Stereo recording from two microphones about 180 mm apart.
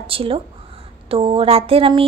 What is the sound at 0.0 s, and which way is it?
A woman's voice, 30° right (ahead or behind).